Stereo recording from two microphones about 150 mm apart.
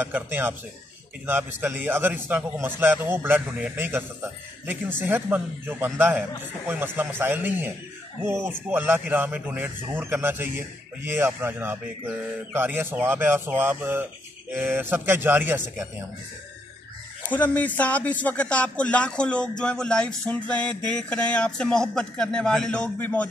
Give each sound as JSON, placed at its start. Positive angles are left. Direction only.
{"t": 0.0, "sound": "a man's voice", "side_deg": -15}
{"t": 17.3, "sound": "speech", "side_deg": 10}